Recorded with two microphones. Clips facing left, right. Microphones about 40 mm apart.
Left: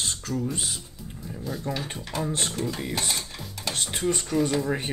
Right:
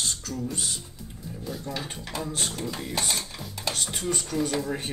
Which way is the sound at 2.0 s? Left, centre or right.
Centre.